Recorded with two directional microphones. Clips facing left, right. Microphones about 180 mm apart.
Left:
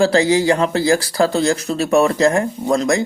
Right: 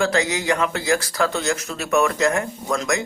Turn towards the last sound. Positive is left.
turn(degrees=35)  # may be behind; listen again after turning